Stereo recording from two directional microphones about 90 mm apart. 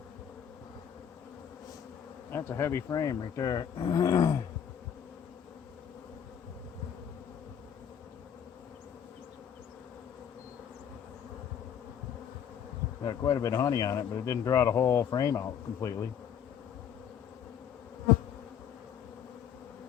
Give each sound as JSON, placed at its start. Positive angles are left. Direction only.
{"t": 2.3, "sound": "bee", "side_deg": 25}
{"t": 2.9, "sound": "speech", "side_deg": 40}
{"t": 13.1, "sound": "speech", "side_deg": 40}